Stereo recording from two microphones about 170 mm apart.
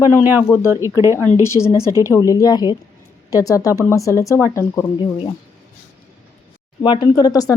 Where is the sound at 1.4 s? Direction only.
15° left (ahead or behind).